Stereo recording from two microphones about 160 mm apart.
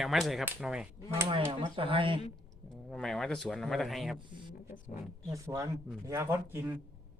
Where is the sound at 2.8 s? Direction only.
5° left (ahead or behind).